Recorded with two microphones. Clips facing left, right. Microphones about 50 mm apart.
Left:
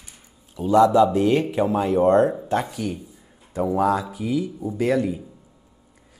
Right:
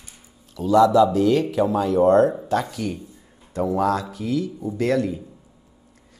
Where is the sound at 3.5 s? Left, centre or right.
Centre.